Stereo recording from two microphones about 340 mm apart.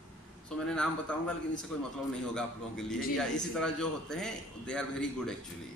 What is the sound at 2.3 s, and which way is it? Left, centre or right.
Speech, centre.